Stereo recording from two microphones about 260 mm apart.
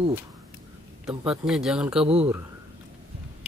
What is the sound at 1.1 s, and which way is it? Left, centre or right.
Speech, centre.